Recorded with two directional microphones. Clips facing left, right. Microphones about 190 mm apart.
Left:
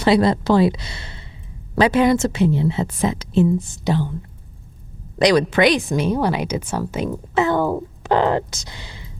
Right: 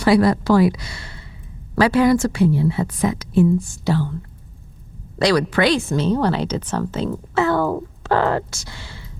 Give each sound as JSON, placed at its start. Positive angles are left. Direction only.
{"t": 0.0, "sound": "a woman's voice", "side_deg": 20}
{"t": 5.2, "sound": "speech", "side_deg": 20}